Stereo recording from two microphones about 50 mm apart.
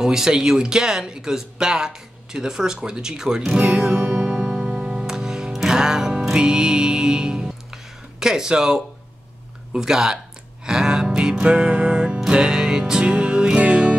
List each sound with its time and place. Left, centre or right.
0.0 s a sound: centre
9.8 s speech: centre
10.6 s music: centre